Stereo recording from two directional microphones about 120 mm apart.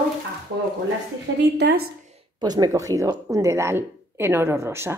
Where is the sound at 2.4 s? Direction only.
35° right (ahead or behind).